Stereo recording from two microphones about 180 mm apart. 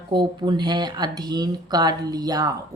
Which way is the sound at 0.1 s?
25° right (ahead or behind).